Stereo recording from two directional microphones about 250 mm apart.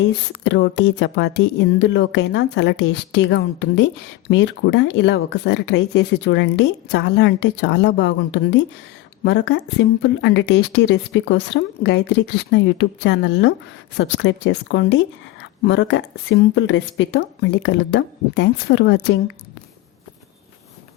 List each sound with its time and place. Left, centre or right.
0.4 s speech: left